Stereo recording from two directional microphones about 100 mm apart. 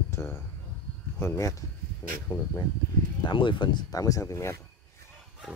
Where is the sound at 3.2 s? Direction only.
55° left (ahead or behind); by 4.6 s 30° left (ahead or behind).